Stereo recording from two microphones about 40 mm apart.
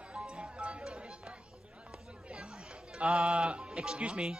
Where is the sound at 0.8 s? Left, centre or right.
Right.